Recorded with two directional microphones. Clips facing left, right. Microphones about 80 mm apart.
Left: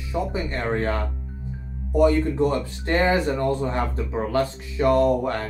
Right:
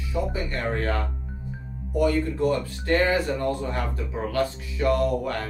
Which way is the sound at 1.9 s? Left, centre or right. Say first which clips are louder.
Left 4 dB; left.